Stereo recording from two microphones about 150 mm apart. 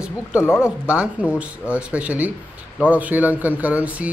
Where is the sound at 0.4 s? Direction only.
15° left (ahead or behind).